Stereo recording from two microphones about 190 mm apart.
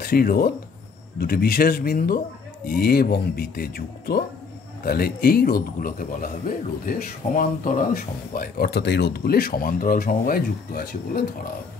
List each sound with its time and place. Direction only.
0.0 s speech: 50° left (ahead or behind)